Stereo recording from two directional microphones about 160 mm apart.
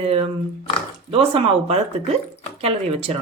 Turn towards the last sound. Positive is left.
turn(degrees=-35)  # may be behind; listen again after turning